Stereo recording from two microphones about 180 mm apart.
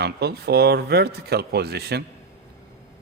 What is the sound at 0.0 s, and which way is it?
Speech, 65° right (ahead or behind).